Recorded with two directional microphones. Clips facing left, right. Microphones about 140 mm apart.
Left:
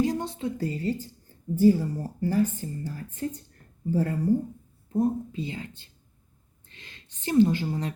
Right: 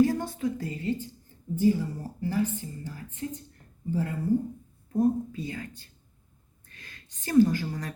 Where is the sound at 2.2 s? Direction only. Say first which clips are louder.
Left 3 dB; 45° left (ahead or behind).